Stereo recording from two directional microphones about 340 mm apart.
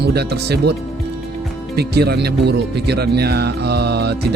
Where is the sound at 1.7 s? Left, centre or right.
Right.